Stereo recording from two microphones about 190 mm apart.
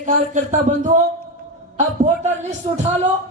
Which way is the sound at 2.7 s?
20° right (ahead or behind).